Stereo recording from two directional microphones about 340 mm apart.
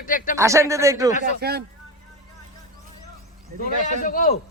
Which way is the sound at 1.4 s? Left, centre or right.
Right.